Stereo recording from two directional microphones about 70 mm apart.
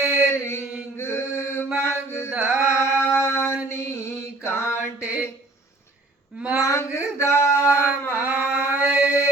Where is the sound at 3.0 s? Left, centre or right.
Left.